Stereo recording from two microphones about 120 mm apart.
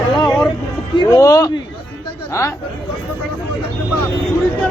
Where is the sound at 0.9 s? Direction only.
35° left (ahead or behind).